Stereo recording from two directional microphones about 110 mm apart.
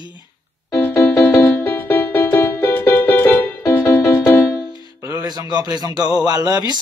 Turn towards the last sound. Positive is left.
turn(degrees=-35)  # may be behind; listen again after turning